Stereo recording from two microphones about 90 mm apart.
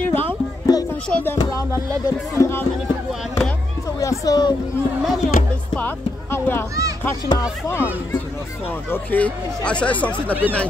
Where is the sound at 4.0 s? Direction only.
40° left (ahead or behind).